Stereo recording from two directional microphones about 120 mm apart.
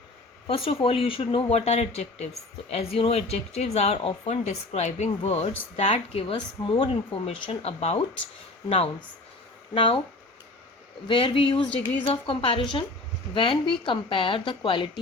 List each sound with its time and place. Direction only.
0.4 s speech: 50° left (ahead or behind)
6.3 s speech: 40° left (ahead or behind); by 8.0 s 60° left (ahead or behind)
9.7 s speech: 45° left (ahead or behind)
11.1 s speech: 45° left (ahead or behind)